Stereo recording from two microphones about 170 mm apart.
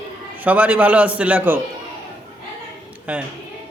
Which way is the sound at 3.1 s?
10° right (ahead or behind).